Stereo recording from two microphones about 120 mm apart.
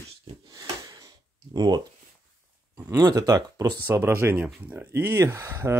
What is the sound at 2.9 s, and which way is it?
Speech, 30° right (ahead or behind).